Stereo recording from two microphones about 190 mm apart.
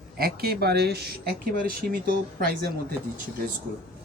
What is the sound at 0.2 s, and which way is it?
Speech, 55° right (ahead or behind).